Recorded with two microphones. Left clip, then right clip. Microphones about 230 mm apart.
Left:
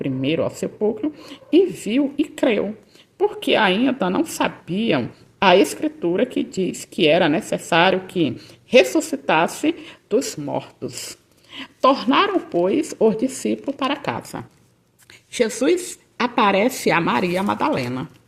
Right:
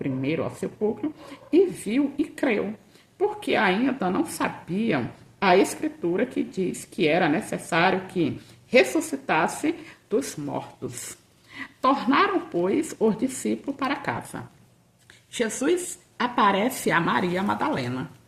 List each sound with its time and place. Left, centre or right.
0.0 s a woman's voice: left